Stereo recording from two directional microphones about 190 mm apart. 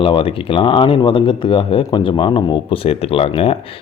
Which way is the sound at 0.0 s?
30° left (ahead or behind).